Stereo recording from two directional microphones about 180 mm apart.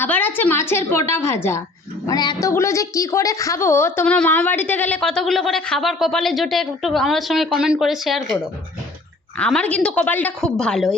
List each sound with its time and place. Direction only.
0.0 s a woman's voice: 10° left (ahead or behind)
9.4 s a woman's voice: 5° left (ahead or behind)